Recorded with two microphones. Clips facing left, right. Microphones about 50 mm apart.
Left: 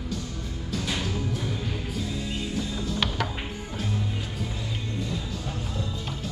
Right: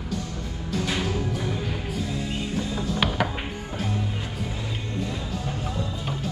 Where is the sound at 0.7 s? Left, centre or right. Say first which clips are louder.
Right 4 dB; centre.